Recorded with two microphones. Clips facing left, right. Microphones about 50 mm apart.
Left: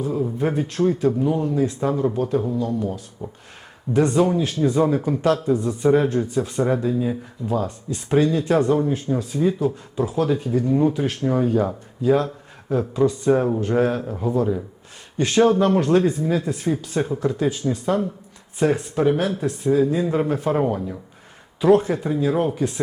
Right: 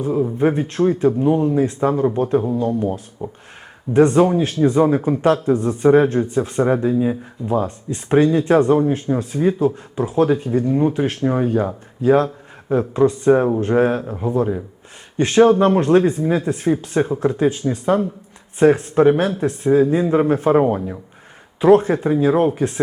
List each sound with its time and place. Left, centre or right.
0.0 s a man's voice: right
9.6 s a man's voice: right
10.9 s a man's voice: right
12.0 s a sound: right
13.0 s a man's voice: right
13.3 s a man's voice: centre